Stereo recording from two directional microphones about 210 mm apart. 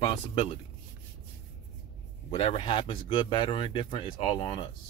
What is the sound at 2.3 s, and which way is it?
Speech, 30° left (ahead or behind).